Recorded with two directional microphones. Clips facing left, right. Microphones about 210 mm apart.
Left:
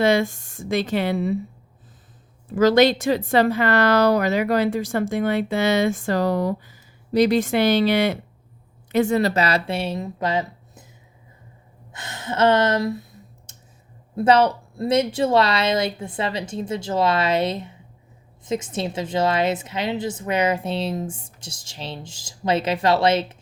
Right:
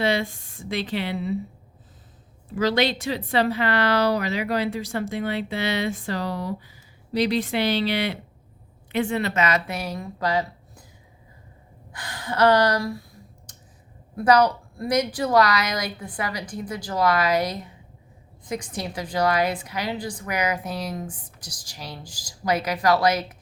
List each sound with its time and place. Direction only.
0.0 s a woman's voice: 45° left (ahead or behind)
2.6 s a woman's voice: 45° left (ahead or behind); by 10.8 s 20° left (ahead or behind)
11.9 s clicking: 25° left (ahead or behind)
14.2 s a woman's voice: 25° left (ahead or behind)